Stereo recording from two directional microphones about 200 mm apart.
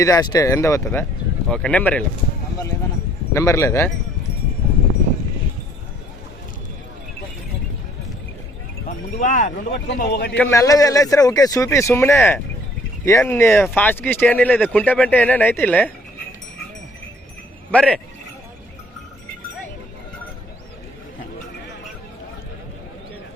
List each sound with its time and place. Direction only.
0.0 s speech: 20° left (ahead or behind)
3.3 s speech: 15° left (ahead or behind)
8.9 s speech: 40° left (ahead or behind)
9.7 s a man's voice: 55° left (ahead or behind)
10.3 s speech: 10° left (ahead or behind)
17.7 s speech: 5° left (ahead or behind)